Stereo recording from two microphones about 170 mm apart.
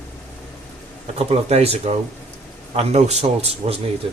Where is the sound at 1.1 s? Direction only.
35° right (ahead or behind).